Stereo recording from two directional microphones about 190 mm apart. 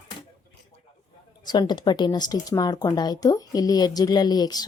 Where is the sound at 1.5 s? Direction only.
20° left (ahead or behind).